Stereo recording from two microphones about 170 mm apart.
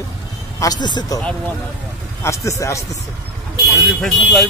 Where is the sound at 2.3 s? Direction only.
15° left (ahead or behind).